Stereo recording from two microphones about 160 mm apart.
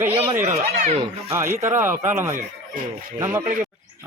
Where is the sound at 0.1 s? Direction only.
35° right (ahead or behind).